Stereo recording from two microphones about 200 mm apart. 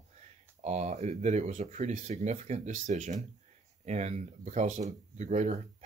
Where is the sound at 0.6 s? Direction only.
35° right (ahead or behind).